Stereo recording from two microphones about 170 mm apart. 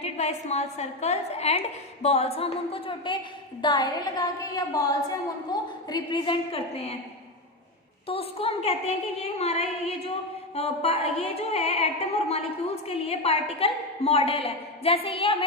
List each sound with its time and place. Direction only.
0.0 s a woman's voice: 40° left (ahead or behind)
8.0 s a woman's voice: 35° left (ahead or behind)